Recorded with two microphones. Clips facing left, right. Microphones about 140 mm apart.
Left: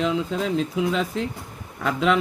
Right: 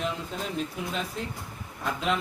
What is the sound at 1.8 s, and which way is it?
Speech, 90° left.